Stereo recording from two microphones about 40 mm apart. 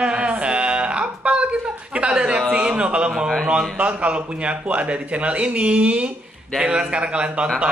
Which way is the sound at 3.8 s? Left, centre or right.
Right.